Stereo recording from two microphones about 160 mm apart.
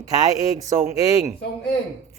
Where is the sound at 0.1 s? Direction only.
25° right (ahead or behind).